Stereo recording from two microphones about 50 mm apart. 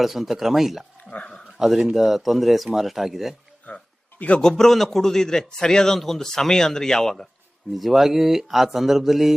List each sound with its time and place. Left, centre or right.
0.0 s speech: centre
1.1 s speech: left
1.5 s speech: centre
3.7 s speech: left
4.4 s a man's voice: centre
7.7 s speech: centre